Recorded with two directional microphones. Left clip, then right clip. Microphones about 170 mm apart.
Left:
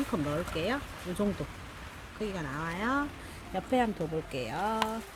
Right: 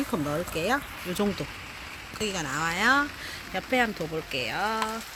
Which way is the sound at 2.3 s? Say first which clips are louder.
Right 9 dB; 20° right (ahead or behind).